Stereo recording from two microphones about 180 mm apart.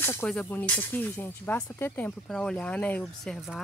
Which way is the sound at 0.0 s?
10° left (ahead or behind).